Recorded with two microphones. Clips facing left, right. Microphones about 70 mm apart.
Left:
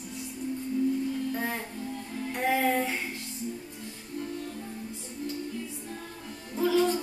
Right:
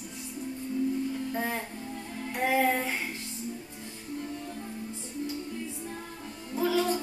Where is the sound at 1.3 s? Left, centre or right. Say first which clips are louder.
Right 1 dB; centre.